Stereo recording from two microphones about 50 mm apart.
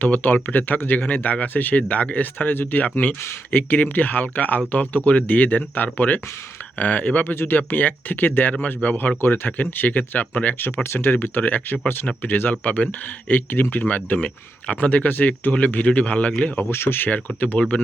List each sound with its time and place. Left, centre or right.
0.0 s speech: left
7.3 s speech: left
8.6 s a man's voice: left
9.0 s speech: left
10.8 s speech: left
15.9 s a man's voice: left
16.6 s speech: left
17.1 s speech: left